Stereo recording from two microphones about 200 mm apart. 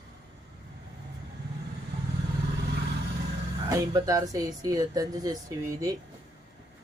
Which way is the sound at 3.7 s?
15° right (ahead or behind).